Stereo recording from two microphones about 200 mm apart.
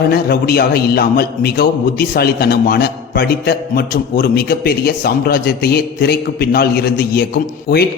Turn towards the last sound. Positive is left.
turn(degrees=50)  # may be behind; listen again after turning